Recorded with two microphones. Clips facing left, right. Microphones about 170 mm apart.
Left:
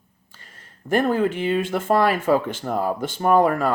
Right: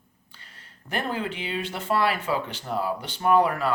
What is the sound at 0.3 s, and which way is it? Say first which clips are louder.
Speech: left 3 dB; 45° left (ahead or behind).